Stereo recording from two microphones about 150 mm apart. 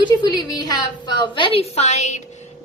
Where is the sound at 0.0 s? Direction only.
30° left (ahead or behind); by 2.2 s 50° left (ahead or behind).